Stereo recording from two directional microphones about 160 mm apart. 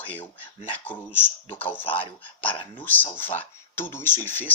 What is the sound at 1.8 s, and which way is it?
Speech, 35° left (ahead or behind).